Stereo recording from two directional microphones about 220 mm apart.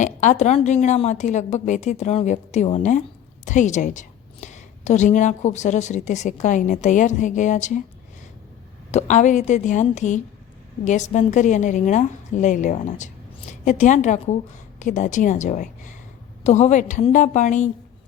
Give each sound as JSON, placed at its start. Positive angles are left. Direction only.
{"t": 0.0, "sound": "a woman's voice", "side_deg": 35}
{"t": 8.9, "sound": "a woman's voice", "side_deg": 30}